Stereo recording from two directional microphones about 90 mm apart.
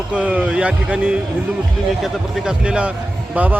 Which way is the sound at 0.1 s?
15° right (ahead or behind).